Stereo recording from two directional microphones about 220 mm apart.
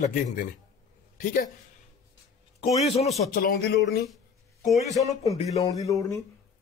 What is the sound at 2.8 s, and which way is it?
Speech, 30° left (ahead or behind).